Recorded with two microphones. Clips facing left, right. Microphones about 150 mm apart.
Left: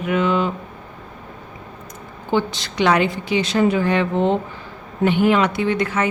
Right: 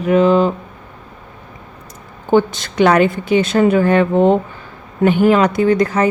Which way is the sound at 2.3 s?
50° right (ahead or behind).